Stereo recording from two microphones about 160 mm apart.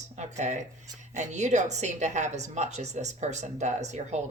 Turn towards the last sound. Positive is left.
turn(degrees=-45)  # may be behind; listen again after turning